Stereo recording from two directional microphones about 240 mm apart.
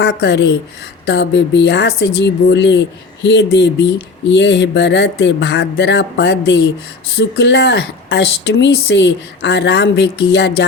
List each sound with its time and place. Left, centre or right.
0.0 s speech: left